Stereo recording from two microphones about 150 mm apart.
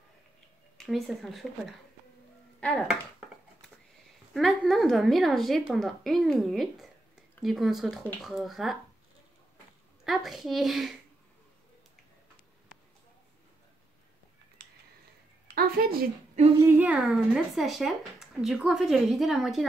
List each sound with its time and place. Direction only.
0.7 s speech: centre (ahead or behind)
4.3 s speech: centre (ahead or behind)
10.0 s speech: centre (ahead or behind)
15.5 s a sound: 85° right
16.5 s speech: 15° right (ahead or behind)